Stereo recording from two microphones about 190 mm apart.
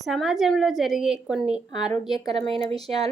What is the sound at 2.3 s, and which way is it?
Speech, 30° right (ahead or behind).